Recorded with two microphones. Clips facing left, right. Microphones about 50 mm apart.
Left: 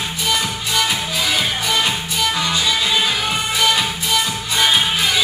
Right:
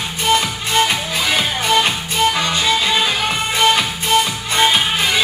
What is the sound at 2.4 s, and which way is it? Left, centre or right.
Music, right.